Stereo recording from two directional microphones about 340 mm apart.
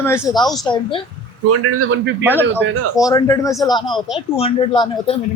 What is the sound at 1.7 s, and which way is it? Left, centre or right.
Speech, right.